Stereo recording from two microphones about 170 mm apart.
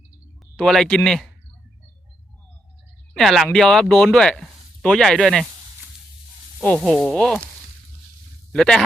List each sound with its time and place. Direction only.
0.5 s speech: centre (ahead or behind)
3.2 s speech: centre (ahead or behind)
6.7 s speech: centre (ahead or behind)
8.5 s speech: 5° left (ahead or behind)